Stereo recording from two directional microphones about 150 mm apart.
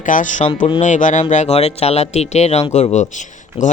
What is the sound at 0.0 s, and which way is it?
Speech, 60° left (ahead or behind).